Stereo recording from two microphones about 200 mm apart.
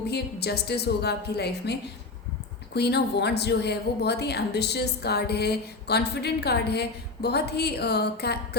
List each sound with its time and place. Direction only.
0.1 s a woman's voice: 55° left (ahead or behind)